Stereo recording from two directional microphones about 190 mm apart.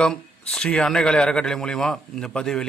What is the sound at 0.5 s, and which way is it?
A man's voice, 5° left (ahead or behind).